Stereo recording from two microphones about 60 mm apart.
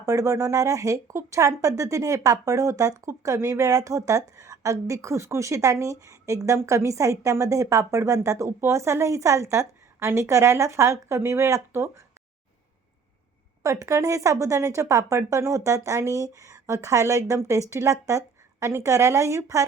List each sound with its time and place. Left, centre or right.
0.0 s speech: right
13.6 s speech: right
18.6 s a woman's voice: right